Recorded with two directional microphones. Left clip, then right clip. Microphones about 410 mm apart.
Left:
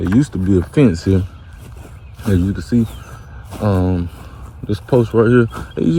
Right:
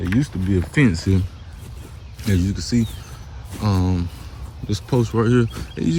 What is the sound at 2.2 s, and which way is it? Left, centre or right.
Speech, centre.